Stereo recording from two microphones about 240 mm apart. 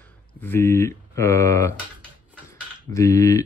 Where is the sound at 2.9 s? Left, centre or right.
Centre.